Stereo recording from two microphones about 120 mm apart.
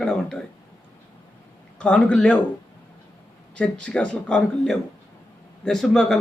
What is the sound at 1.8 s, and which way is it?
Speech, 10° left (ahead or behind).